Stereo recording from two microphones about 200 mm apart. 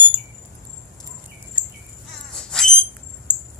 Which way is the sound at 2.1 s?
5° left (ahead or behind).